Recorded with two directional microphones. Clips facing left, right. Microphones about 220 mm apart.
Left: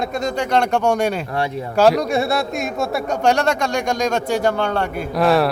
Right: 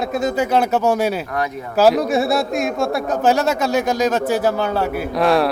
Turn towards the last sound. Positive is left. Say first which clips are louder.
# even
turn(degrees=0)  # may be behind; listen again after turning